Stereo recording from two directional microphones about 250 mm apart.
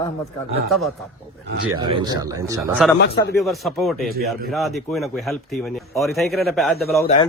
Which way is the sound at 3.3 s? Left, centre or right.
Centre.